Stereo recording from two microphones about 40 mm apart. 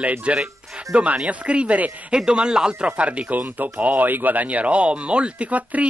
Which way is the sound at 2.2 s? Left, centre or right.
Right.